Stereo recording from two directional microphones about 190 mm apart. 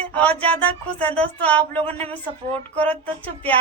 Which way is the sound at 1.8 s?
30° right (ahead or behind).